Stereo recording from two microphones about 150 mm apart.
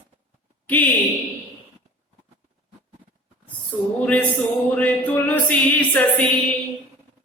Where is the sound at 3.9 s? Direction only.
10° left (ahead or behind).